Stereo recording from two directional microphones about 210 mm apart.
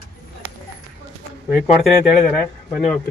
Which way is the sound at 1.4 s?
10° right (ahead or behind).